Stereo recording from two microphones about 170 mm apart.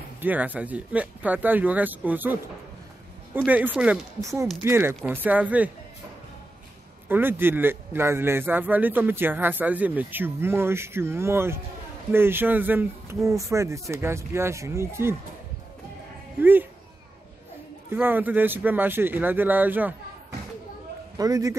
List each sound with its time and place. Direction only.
0.2 s a man's voice: 10° right (ahead or behind)
3.3 s a man's voice: 10° right (ahead or behind)
4.2 s a man's voice: 20° right (ahead or behind)
7.1 s a man's voice: 10° right (ahead or behind)
16.3 s speech: 10° right (ahead or behind)
17.9 s a man's voice: 10° right (ahead or behind)
21.2 s a man's voice: 20° right (ahead or behind)